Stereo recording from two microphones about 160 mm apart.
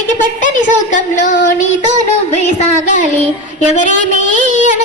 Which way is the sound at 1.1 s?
50° left (ahead or behind).